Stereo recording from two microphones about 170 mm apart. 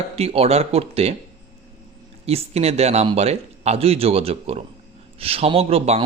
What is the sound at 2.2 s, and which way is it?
A man's voice, 35° right (ahead or behind).